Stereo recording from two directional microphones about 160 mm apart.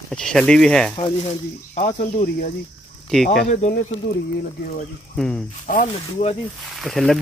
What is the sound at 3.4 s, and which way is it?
Speech, 60° left (ahead or behind).